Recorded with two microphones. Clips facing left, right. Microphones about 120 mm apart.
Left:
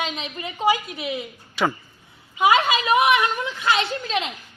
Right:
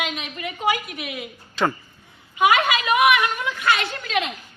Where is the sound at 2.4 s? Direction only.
30° left (ahead or behind).